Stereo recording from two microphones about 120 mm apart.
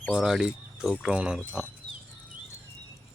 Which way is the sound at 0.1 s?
5° right (ahead or behind).